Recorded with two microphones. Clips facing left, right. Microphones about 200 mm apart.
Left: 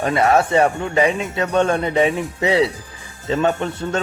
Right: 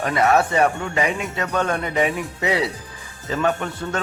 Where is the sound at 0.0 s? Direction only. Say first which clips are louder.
Left 2 dB; 30° left (ahead or behind).